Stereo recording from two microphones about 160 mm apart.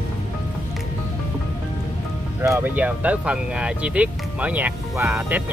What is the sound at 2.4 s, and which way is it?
Speech, 15° right (ahead or behind).